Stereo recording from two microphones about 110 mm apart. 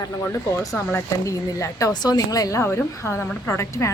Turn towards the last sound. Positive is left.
turn(degrees=25)  # may be behind; listen again after turning